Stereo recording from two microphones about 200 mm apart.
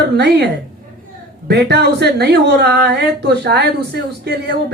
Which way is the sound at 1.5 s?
55° right (ahead or behind).